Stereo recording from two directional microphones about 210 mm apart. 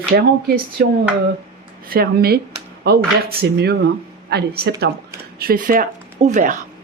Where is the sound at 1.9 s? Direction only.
45° right (ahead or behind).